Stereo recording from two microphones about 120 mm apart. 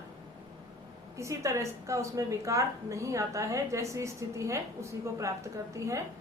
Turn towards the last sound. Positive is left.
turn(degrees=-25)  # may be behind; listen again after turning